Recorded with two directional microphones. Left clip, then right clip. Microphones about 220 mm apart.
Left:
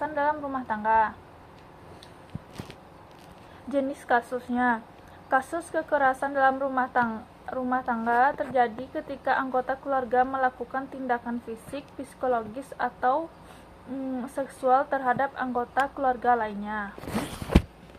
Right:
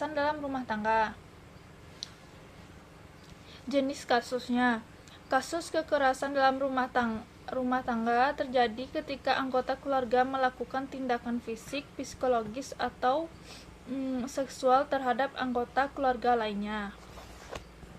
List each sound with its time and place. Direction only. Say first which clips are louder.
0.0 s a woman's voice: left 4 dB; 35° right (ahead or behind)
3.7 s a woman's voice: left 3 dB; 35° right (ahead or behind)
14.2 s a woman's voice: left 2 dB; 35° right (ahead or behind)